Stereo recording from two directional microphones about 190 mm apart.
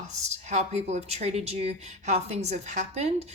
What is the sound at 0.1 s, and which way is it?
Speech, 35° right (ahead or behind).